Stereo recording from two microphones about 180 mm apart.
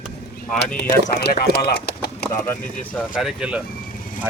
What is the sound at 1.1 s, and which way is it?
Speech, 60° left (ahead or behind).